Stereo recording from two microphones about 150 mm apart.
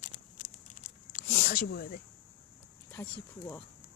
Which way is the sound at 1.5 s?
85° left.